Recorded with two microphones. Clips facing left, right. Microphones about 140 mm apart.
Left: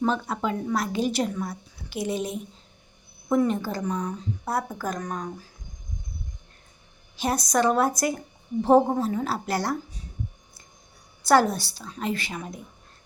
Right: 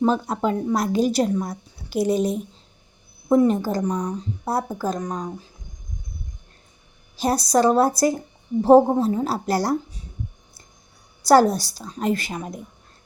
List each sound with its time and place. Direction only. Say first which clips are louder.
0.0 s a woman's voice: right 5 dB; 40° right (ahead or behind); by 5.5 s 20° right (ahead or behind)
7.2 s a woman's voice: right 5 dB; 35° right (ahead or behind)
11.2 s a woman's voice: right 5 dB; 35° right (ahead or behind)